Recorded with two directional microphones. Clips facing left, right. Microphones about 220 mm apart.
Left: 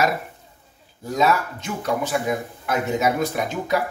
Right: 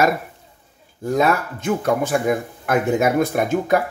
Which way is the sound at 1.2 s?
50° right (ahead or behind).